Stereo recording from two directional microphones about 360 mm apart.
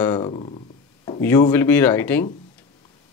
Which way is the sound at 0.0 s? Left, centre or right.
Centre.